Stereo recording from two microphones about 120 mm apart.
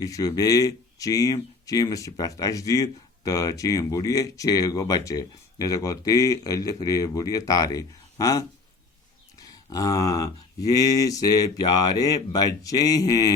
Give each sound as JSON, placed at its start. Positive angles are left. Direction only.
{"t": 0.0, "sound": "speech", "side_deg": 30}